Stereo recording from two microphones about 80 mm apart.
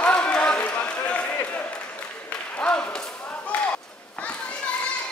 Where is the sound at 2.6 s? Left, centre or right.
Centre.